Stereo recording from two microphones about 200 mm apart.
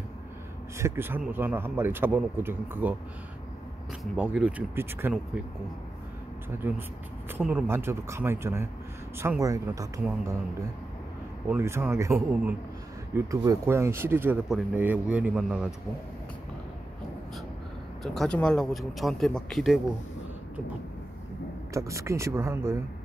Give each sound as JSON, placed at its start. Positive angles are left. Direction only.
{"t": 0.7, "sound": "speech", "side_deg": -10}
{"t": 4.0, "sound": "speech", "side_deg": -5}
{"t": 6.6, "sound": "speech", "side_deg": -10}
{"t": 11.4, "sound": "speech", "side_deg": -10}
{"t": 18.0, "sound": "speech", "side_deg": 0}
{"t": 21.7, "sound": "speech", "side_deg": -15}